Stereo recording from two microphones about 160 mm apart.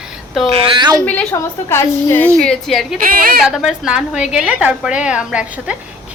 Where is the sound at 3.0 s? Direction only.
65° right (ahead or behind).